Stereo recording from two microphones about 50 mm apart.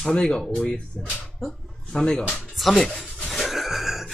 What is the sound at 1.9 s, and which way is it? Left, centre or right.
Speech, centre.